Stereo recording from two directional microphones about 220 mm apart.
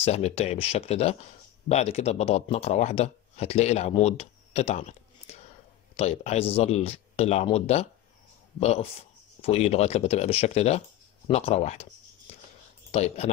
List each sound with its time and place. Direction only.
0.0 s speech: 30° left (ahead or behind)
12.3 s a sound: 30° left (ahead or behind)
12.9 s speech: 30° left (ahead or behind)